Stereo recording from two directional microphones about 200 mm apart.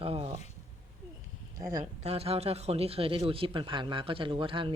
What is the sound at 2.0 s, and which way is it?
Speech, 30° right (ahead or behind).